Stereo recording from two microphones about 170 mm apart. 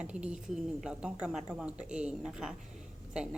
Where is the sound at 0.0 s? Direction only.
5° right (ahead or behind).